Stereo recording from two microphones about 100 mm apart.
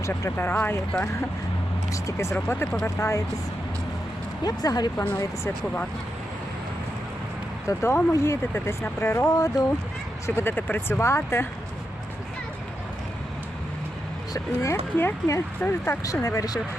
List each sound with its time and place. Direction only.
0.0 s speech: 25° left (ahead or behind)
1.9 s speech: 30° left (ahead or behind)
4.4 s speech: 40° left (ahead or behind)
7.7 s speech: 30° left (ahead or behind)
9.3 s speech: 35° left (ahead or behind)
10.2 s speech: 25° left (ahead or behind)
14.3 s speech: 30° left (ahead or behind)
14.9 s speech: 20° left (ahead or behind)
16.2 s speech: 35° left (ahead or behind)